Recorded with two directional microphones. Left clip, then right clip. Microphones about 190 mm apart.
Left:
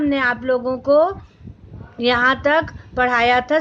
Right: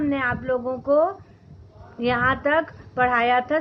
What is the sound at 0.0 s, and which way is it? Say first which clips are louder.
A woman's voice: left 5 dB; 50° left (ahead or behind).